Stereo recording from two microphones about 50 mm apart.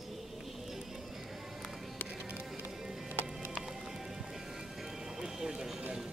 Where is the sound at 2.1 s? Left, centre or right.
Right.